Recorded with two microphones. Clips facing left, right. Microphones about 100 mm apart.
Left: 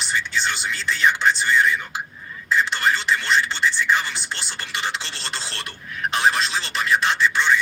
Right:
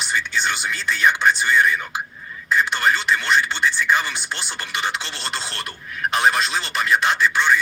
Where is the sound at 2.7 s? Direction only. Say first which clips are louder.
Right 2 dB; 20° right (ahead or behind).